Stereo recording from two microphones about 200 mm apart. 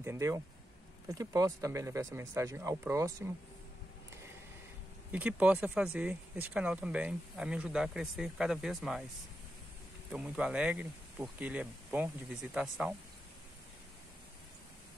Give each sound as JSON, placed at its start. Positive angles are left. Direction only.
{"t": 0.0, "sound": "speech", "side_deg": -15}
{"t": 5.1, "sound": "speech", "side_deg": -5}
{"t": 10.1, "sound": "speech", "side_deg": -5}